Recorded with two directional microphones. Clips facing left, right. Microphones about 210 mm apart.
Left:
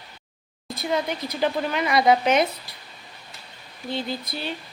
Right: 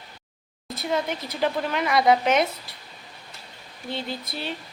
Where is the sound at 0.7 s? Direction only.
Centre (ahead or behind).